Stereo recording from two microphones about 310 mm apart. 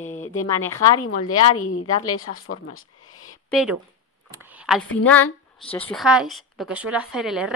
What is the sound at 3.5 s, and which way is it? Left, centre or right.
Speech, centre.